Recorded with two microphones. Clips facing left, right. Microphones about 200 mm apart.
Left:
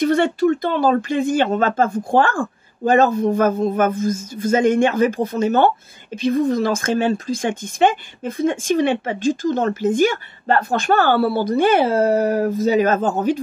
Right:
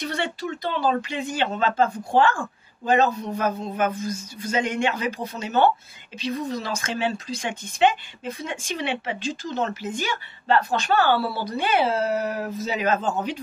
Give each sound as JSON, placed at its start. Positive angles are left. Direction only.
{"t": 0.0, "sound": "speech", "side_deg": 50}